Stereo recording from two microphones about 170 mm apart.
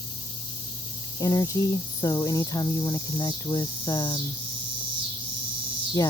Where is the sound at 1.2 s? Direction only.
20° left (ahead or behind).